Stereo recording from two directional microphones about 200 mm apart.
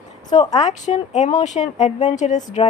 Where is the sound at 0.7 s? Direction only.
35° left (ahead or behind).